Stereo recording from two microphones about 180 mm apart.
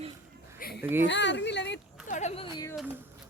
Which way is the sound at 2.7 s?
10° right (ahead or behind).